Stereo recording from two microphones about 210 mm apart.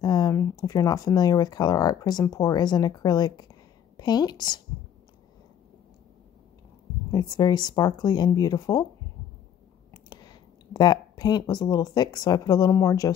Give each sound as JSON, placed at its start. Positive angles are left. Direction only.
{"t": 0.0, "sound": "a woman's voice", "side_deg": 20}
{"t": 7.1, "sound": "speech", "side_deg": 20}
{"t": 10.0, "sound": "speech", "side_deg": 20}